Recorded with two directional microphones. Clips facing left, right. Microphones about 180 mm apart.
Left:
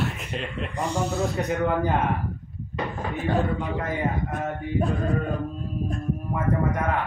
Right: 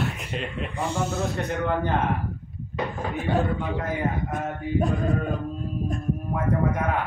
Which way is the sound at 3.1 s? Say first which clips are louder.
Even; centre (ahead or behind).